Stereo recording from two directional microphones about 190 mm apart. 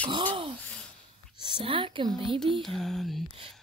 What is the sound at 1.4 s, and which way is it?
A woman's voice, 25° right (ahead or behind).